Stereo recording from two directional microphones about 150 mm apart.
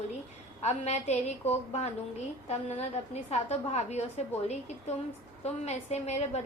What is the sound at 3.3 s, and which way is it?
A woman's voice, 45° left (ahead or behind).